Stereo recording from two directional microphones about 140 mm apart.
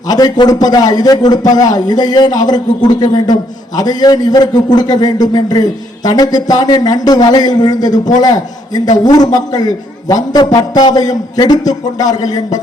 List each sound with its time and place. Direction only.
0.1 s a man's voice: 30° left (ahead or behind)